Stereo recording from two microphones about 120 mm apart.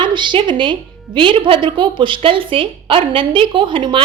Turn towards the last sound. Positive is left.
turn(degrees=-45)  # may be behind; listen again after turning